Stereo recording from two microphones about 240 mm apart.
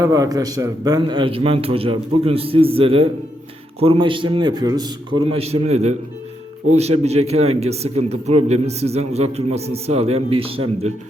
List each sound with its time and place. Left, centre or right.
0.0 s a man's voice: centre